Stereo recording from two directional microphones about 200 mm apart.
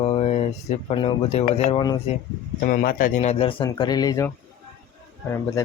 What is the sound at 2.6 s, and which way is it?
Speech, 45° left (ahead or behind).